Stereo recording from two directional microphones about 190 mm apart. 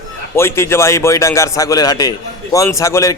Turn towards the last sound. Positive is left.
turn(degrees=15)  # may be behind; listen again after turning